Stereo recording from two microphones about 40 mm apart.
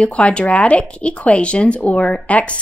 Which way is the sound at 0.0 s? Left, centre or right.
Left.